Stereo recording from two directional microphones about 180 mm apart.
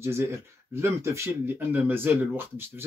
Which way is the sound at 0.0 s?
15° right (ahead or behind).